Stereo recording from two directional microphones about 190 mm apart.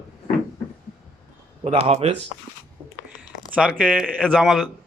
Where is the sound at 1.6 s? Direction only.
35° right (ahead or behind).